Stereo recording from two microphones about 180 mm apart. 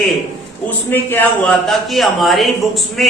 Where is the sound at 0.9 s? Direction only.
10° left (ahead or behind).